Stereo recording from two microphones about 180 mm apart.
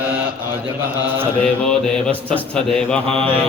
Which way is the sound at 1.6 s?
5° left (ahead or behind).